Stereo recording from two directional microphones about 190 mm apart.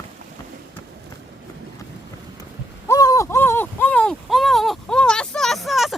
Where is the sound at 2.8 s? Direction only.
20° left (ahead or behind).